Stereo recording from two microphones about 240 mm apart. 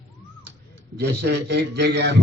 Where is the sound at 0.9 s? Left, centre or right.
Right.